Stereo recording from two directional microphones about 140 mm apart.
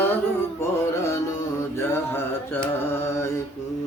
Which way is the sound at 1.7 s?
15° left (ahead or behind).